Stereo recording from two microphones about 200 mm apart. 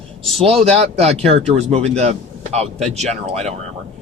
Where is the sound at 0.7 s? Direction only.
30° right (ahead or behind).